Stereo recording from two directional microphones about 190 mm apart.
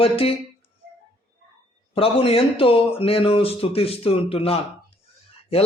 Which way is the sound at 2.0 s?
30° left (ahead or behind).